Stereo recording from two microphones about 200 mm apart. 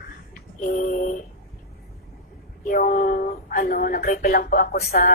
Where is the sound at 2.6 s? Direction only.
45° left (ahead or behind).